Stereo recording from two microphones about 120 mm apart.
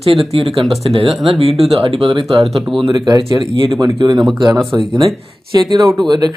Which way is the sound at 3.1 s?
40° right (ahead or behind).